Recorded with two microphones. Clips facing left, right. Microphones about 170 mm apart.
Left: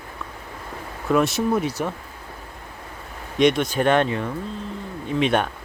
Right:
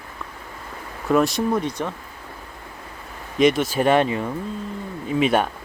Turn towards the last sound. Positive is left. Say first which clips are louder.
# right 1 dB
turn(degrees=-5)  # may be behind; listen again after turning